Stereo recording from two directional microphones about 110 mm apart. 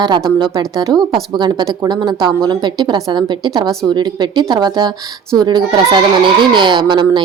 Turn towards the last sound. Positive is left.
turn(degrees=-45)  # may be behind; listen again after turning